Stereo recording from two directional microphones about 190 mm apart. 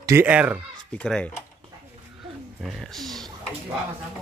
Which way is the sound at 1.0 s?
5° left (ahead or behind).